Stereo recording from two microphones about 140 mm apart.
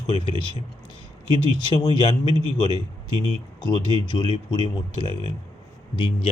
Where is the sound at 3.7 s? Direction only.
35° left (ahead or behind).